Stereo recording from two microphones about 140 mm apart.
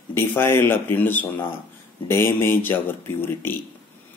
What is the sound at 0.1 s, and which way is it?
Speech, 15° left (ahead or behind).